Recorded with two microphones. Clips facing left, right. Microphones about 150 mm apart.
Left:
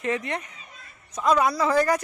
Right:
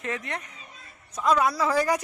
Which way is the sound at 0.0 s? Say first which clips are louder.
Left 5 dB; centre (ahead or behind).